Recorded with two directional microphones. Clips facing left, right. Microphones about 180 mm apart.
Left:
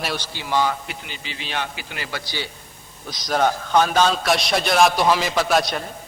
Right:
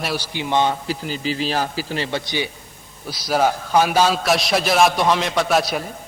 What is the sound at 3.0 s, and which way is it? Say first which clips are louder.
A man's voice: right 2 dB; 5° right (ahead or behind).